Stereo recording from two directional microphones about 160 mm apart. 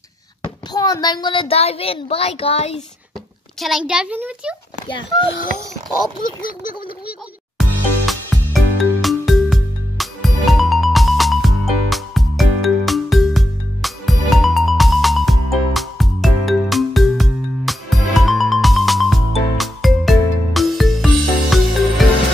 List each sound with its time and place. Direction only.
0.7 s a child's voice: 20° left (ahead or behind); by 2.8 s 40° left (ahead or behind)
3.5 s a child's voice: centre (ahead or behind)
8.1 s music: centre (ahead or behind)